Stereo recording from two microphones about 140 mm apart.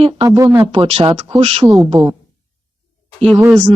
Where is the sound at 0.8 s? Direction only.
45° right (ahead or behind).